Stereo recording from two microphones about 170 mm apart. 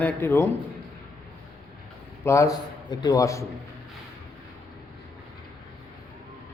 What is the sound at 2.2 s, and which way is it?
A man's voice, 20° left (ahead or behind).